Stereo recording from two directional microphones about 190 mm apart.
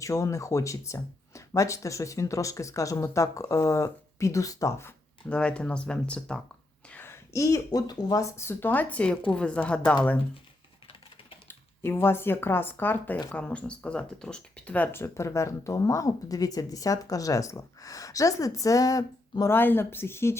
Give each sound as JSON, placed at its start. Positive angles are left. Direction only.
{"t": 0.0, "sound": "speech", "side_deg": 15}
{"t": 5.3, "sound": "speech", "side_deg": 5}
{"t": 11.4, "sound": "speech", "side_deg": 10}